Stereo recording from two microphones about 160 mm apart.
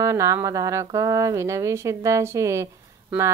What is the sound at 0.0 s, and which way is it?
A woman's voice, 20° right (ahead or behind).